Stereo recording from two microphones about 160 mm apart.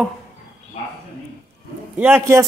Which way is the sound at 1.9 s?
10° right (ahead or behind).